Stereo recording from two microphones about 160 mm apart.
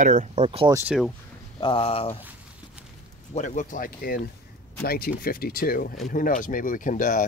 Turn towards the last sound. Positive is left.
turn(degrees=55)  # may be behind; listen again after turning